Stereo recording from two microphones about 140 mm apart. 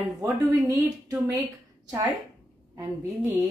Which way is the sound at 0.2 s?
25° right (ahead or behind).